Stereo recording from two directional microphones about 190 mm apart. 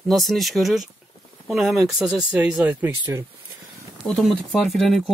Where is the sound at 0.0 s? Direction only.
Centre (ahead or behind).